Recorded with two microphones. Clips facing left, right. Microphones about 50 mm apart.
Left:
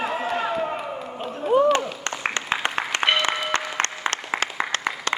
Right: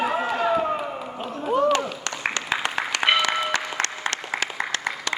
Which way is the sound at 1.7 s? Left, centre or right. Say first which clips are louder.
Left 1 dB; left.